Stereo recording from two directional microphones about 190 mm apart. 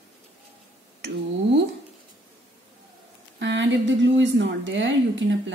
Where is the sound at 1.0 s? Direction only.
65° right (ahead or behind).